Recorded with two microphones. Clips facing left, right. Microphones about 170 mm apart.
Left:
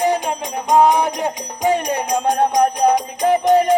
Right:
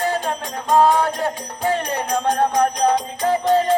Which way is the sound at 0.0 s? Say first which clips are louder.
Left 4 dB; 15° left (ahead or behind).